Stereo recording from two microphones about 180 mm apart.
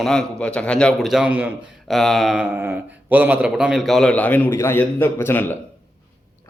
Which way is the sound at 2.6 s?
10° right (ahead or behind).